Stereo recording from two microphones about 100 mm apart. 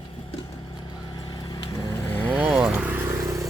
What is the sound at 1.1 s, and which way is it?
Vehicle, 45° left (ahead or behind).